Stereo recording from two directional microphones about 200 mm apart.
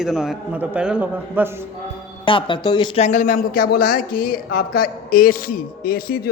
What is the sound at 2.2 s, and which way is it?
Speech, 25° left (ahead or behind).